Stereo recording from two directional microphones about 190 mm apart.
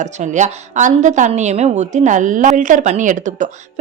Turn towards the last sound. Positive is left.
turn(degrees=-40)  # may be behind; listen again after turning